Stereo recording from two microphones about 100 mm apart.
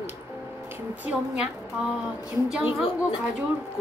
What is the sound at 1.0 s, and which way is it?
A woman's voice, 10° right (ahead or behind).